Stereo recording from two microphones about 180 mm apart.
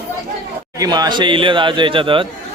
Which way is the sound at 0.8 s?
20° right (ahead or behind).